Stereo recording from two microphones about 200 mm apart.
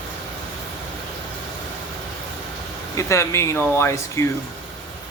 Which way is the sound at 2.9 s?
15° left (ahead or behind).